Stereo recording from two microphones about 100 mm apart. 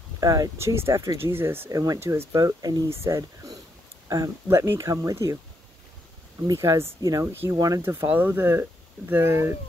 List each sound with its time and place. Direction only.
0.2 s speech: 40° right (ahead or behind)
0.6 s speech: 25° right (ahead or behind)
1.7 s speech: 35° right (ahead or behind)
6.4 s speech: 35° right (ahead or behind)
7.8 s speech: 25° right (ahead or behind)